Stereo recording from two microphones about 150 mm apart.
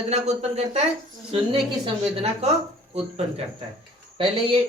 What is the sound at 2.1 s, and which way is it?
Speech, 45° right (ahead or behind).